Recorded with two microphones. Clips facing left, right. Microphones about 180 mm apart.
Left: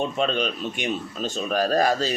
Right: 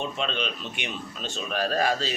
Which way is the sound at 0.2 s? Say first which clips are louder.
Left 6 dB; 45° left (ahead or behind).